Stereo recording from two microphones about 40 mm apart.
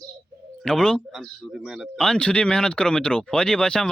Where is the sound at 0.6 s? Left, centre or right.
Centre.